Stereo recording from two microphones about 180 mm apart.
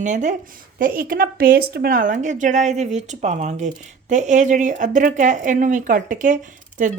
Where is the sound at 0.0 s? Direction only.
45° right (ahead or behind).